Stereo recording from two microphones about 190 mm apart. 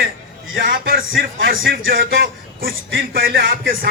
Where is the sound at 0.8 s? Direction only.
50° right (ahead or behind).